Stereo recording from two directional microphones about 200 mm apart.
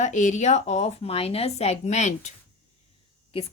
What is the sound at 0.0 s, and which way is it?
A woman's voice, 35° left (ahead or behind).